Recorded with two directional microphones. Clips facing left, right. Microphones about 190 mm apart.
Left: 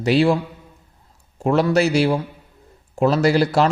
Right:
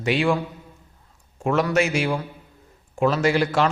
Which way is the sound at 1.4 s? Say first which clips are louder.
Left 4 dB; 35° left (ahead or behind).